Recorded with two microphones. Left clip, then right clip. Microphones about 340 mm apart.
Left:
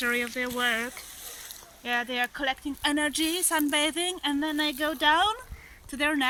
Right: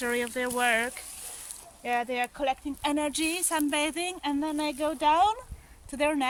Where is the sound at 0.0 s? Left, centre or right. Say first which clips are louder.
Left 1 dB; right.